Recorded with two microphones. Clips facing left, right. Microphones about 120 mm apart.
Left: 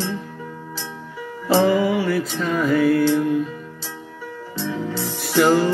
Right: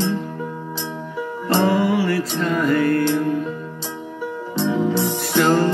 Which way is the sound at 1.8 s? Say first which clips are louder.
Right 1 dB; centre (ahead or behind).